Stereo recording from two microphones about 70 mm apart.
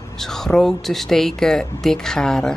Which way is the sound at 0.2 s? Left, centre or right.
Centre.